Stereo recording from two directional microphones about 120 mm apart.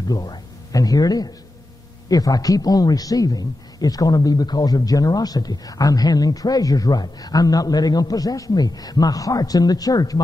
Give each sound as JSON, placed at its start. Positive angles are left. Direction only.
{"t": 0.1, "sound": "a man's voice", "side_deg": 30}